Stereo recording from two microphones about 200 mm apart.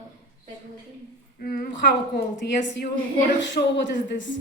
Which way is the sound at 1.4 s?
45° left (ahead or behind).